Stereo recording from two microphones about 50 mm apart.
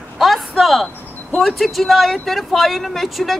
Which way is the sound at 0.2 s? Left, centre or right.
Centre.